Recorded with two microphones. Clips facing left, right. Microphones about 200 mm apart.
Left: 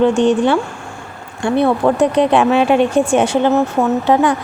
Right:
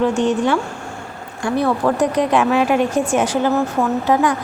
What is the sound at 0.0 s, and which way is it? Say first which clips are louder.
Speech: left 4 dB; 30° left (ahead or behind).